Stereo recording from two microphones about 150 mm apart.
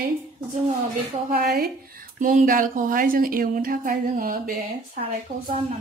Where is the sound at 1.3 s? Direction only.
85° right; by 5.0 s 65° right (ahead or behind).